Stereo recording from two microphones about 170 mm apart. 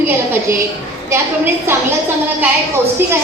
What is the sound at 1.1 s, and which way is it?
Speech, 15° right (ahead or behind).